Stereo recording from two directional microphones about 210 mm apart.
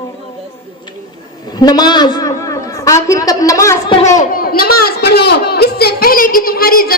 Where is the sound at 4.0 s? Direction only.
35° left (ahead or behind).